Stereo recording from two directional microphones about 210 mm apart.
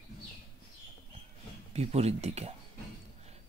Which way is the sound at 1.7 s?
30° right (ahead or behind).